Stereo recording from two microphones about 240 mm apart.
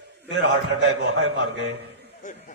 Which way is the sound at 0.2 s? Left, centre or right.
Right.